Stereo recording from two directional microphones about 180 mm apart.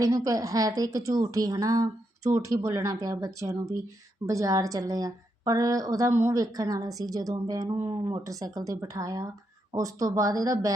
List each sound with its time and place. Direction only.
0.0 s a woman's voice: 20° right (ahead or behind)